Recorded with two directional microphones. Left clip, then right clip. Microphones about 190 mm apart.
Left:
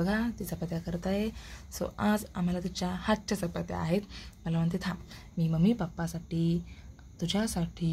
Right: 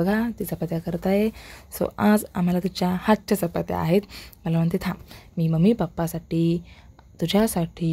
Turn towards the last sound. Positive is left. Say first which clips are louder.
# right 10 dB
turn(degrees=-40)  # may be behind; listen again after turning